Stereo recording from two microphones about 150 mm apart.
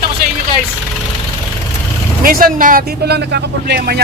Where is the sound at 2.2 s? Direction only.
70° right (ahead or behind); by 4.0 s 90° right.